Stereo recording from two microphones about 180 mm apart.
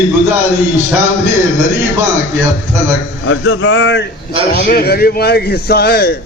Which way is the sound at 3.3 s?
90° left.